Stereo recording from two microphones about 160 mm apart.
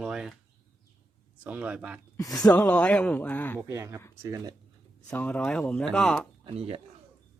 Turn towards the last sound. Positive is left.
turn(degrees=-40)  # may be behind; listen again after turning